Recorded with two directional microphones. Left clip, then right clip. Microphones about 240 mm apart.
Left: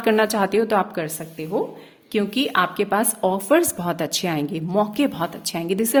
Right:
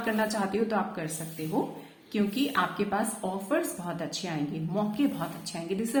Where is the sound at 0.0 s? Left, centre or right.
Left.